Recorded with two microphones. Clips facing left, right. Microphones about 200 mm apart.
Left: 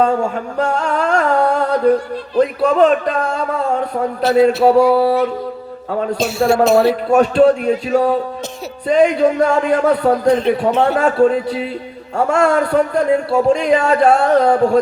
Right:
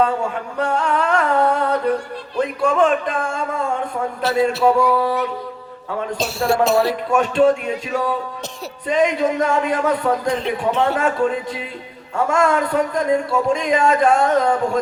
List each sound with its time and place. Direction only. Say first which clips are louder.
0.5 s a man's voice: left 1 dB; 40° left (ahead or behind)
1.5 s a sound: left 5 dB; 40° left (ahead or behind)
2.4 s a man's voice: left 5 dB; 35° left (ahead or behind)
4.2 s speech: left 6 dB; 20° left (ahead or behind)
4.4 s a man's voice: left 4 dB; 35° left (ahead or behind)